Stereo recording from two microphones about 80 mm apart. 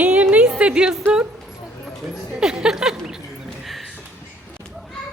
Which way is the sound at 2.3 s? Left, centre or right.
Centre.